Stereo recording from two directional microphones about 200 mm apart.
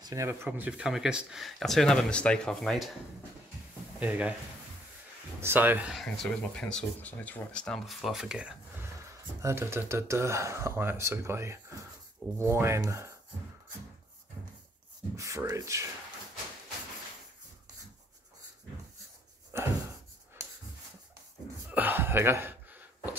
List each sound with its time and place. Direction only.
0.0 s speech: 15° right (ahead or behind); by 2.9 s centre (ahead or behind)
4.0 s speech: 5° right (ahead or behind)
5.4 s speech: 10° right (ahead or behind)
15.1 s speech: 15° right (ahead or behind)
19.5 s a sound: 15° right (ahead or behind)
21.6 s a sound: 10° right (ahead or behind)